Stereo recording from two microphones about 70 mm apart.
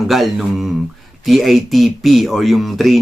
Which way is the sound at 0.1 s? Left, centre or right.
Centre.